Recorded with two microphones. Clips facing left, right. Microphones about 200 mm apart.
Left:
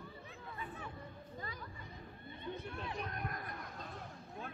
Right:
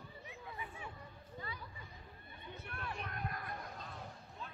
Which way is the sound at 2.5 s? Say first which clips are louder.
Left 3 dB; 20° left (ahead or behind).